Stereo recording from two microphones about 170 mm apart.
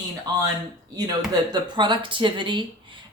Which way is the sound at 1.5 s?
25° right (ahead or behind).